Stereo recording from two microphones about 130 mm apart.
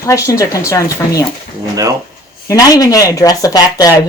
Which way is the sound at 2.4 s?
30° left (ahead or behind).